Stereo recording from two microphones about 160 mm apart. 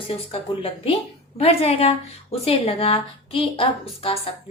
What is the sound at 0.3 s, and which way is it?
A woman's voice, 35° left (ahead or behind).